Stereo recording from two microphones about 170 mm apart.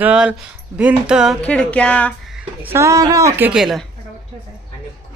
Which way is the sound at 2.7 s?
20° right (ahead or behind).